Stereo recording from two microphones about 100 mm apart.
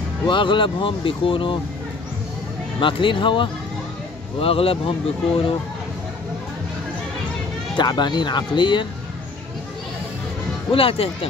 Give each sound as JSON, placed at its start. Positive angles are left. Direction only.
{"t": 0.3, "sound": "speech", "side_deg": 55}
{"t": 2.8, "sound": "speech", "side_deg": 55}
{"t": 4.4, "sound": "speech", "side_deg": 70}
{"t": 7.7, "sound": "speech", "side_deg": 50}
{"t": 10.7, "sound": "speech", "side_deg": 65}